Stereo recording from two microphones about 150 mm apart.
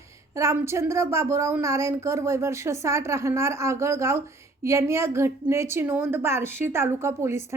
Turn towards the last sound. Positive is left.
turn(degrees=-15)  # may be behind; listen again after turning